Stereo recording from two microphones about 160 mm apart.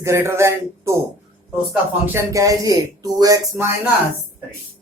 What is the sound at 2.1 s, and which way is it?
Speech, 20° right (ahead or behind).